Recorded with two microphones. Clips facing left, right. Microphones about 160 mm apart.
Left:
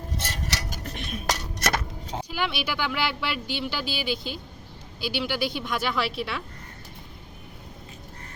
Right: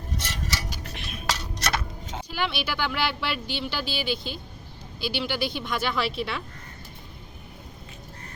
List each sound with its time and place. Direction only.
0.7 s music: 45° left (ahead or behind)
2.3 s a woman's voice: 10° left (ahead or behind)